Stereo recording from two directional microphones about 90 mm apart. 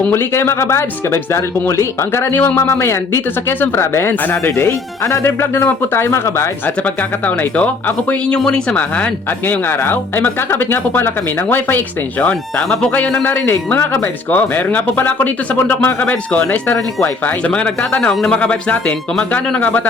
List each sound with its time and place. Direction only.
0.1 s speech: 30° left (ahead or behind)
6.8 s speech: 15° left (ahead or behind)